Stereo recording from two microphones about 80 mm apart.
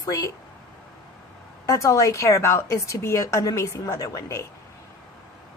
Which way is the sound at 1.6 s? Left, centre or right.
Left.